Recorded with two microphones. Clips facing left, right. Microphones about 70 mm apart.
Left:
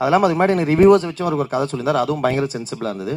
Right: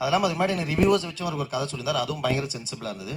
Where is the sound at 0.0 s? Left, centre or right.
Left.